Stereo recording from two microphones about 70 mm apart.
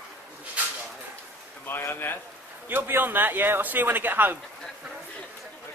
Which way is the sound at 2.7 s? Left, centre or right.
Right.